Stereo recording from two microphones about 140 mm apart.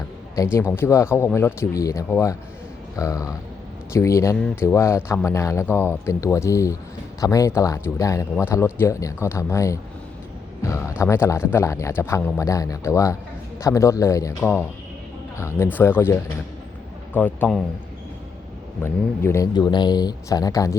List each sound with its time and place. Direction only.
0.4 s a man's voice: 20° left (ahead or behind)
15.4 s speech: 20° left (ahead or behind)
17.2 s speech: 15° left (ahead or behind)
18.8 s a man's voice: 20° left (ahead or behind)
19.5 s a man's voice: 30° left (ahead or behind)